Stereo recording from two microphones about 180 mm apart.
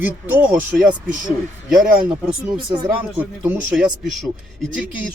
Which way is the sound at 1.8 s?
5° right (ahead or behind).